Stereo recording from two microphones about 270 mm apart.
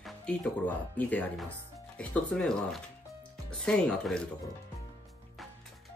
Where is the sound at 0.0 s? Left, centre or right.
Centre.